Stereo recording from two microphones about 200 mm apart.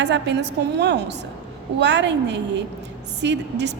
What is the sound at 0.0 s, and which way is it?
A woman's voice, 60° right (ahead or behind).